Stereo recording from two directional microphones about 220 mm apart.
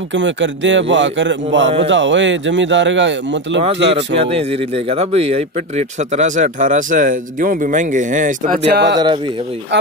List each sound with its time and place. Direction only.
0.1 s speech: 55° right (ahead or behind)
4.2 s speech: 25° right (ahead or behind)
8.6 s speech: 50° right (ahead or behind)